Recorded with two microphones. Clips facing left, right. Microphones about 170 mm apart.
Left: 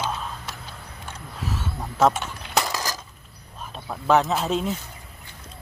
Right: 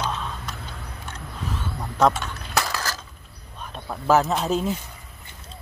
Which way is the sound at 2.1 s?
15° left (ahead or behind).